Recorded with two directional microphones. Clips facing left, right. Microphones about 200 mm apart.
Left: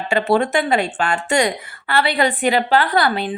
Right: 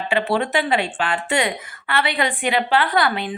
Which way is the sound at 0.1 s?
45° left (ahead or behind).